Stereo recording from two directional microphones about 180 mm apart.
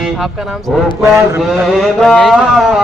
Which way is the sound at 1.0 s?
15° right (ahead or behind).